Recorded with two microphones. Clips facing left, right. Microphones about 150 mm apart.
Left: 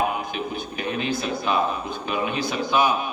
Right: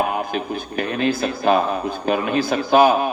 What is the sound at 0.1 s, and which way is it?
A man's voice, 50° right (ahead or behind).